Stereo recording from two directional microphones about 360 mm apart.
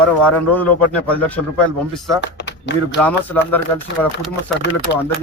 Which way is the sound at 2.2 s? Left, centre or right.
Left.